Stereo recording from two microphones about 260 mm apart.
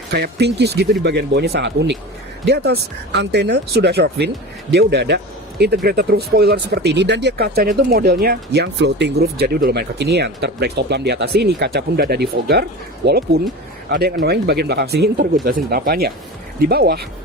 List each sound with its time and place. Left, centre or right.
0.1 s speech: right